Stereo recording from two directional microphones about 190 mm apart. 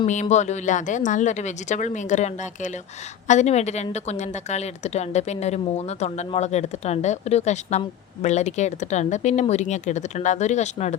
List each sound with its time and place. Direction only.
0.0 s speech: 40° left (ahead or behind)